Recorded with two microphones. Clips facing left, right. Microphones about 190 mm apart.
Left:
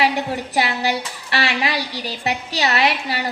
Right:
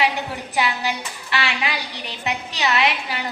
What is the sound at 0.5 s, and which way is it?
A woman's voice, 35° left (ahead or behind).